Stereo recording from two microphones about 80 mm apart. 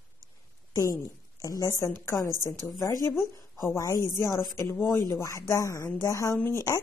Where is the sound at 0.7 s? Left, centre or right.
Left.